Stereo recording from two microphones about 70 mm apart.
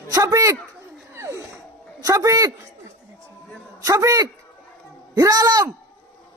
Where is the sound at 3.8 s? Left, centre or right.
Right.